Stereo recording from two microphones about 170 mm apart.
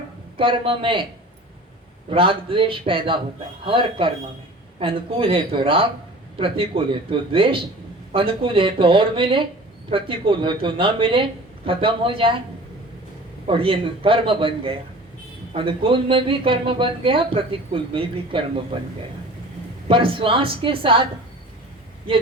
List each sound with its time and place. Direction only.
0.3 s a man's voice: 30° right (ahead or behind)
2.0 s a man's voice: 30° right (ahead or behind)
13.5 s a man's voice: 30° right (ahead or behind)
19.9 s a man's voice: 30° right (ahead or behind)